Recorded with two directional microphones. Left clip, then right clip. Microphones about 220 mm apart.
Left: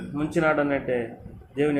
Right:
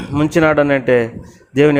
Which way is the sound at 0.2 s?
50° right (ahead or behind).